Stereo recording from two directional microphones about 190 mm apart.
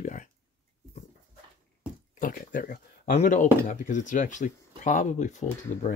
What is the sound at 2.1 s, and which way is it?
Speech, 45° left (ahead or behind).